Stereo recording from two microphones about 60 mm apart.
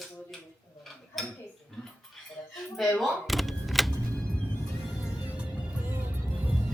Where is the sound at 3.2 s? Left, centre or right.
Centre.